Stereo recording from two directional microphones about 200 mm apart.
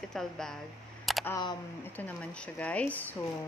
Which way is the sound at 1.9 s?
5° left (ahead or behind).